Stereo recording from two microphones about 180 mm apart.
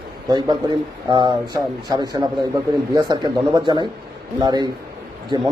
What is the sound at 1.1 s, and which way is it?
A man's voice, 25° right (ahead or behind).